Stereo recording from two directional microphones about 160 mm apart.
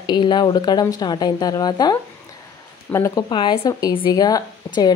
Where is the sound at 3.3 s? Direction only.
30° left (ahead or behind).